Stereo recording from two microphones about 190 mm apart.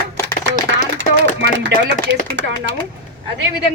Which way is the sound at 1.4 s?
70° right (ahead or behind).